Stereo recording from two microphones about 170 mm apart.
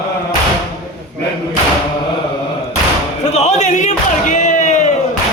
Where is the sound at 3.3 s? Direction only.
40° left (ahead or behind).